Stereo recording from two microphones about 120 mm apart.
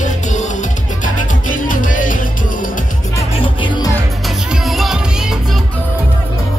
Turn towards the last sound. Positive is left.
turn(degrees=0)  # may be behind; listen again after turning